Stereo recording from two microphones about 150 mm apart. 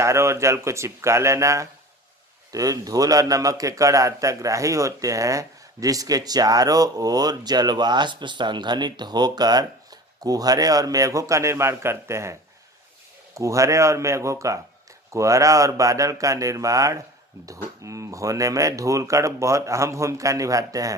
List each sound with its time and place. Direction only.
0.0 s a man's voice: 20° right (ahead or behind)